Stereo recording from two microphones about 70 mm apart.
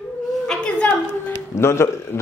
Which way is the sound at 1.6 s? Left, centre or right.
Left.